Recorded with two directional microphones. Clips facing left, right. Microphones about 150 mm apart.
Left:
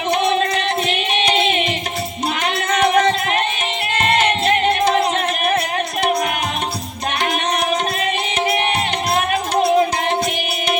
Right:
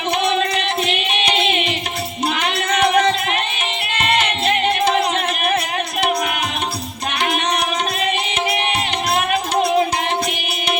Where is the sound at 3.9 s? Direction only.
45° left (ahead or behind).